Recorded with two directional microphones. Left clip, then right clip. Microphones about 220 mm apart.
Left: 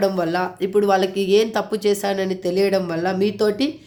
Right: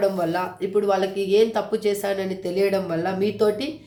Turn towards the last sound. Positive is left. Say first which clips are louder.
# left 2 dB
turn(degrees=45)  # may be behind; listen again after turning